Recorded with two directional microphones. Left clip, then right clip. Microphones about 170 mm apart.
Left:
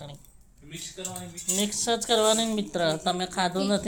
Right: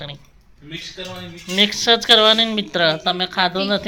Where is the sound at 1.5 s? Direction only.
5° left (ahead or behind).